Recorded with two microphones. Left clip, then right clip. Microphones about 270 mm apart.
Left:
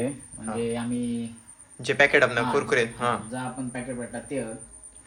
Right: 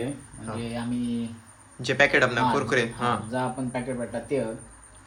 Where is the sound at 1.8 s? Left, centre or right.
Centre.